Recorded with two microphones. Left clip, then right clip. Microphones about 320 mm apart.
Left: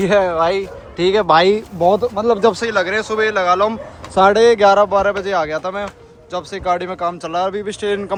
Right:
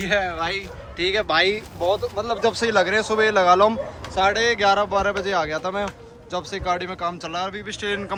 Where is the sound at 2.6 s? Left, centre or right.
Centre.